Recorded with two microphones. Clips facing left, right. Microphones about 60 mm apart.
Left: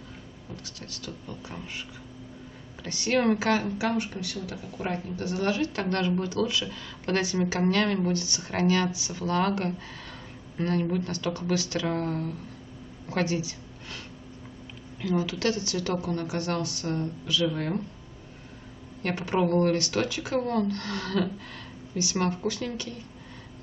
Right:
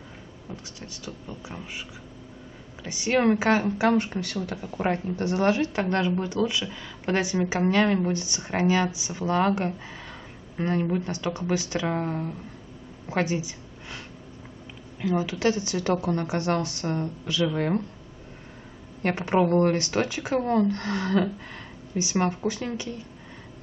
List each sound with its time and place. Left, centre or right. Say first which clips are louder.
0.7 s speech: right 1 dB; centre
3.3 s speech: right 3 dB; right
3.6 s a woman's voice: right 5 dB; right
19.0 s speech: right 3 dB; right